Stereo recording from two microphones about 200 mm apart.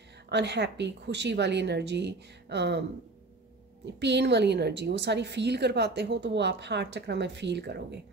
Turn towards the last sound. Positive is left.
turn(degrees=-55)  # may be behind; listen again after turning